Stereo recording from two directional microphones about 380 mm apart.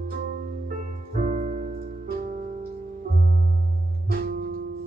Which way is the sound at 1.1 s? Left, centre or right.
Centre.